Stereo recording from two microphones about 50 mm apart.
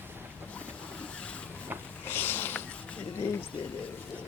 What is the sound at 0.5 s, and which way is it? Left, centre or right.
Boat, left.